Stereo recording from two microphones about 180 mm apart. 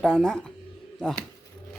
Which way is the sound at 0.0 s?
5° left (ahead or behind).